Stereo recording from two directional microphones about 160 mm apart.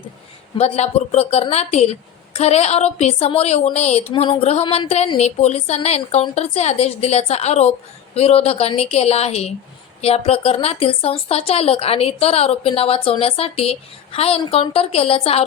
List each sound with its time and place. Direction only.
0.6 s a woman's voice: 40° left (ahead or behind)